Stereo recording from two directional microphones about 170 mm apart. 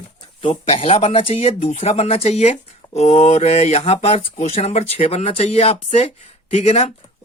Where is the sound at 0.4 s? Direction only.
35° left (ahead or behind).